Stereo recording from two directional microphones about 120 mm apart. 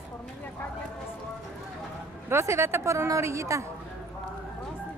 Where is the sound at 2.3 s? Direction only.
25° right (ahead or behind).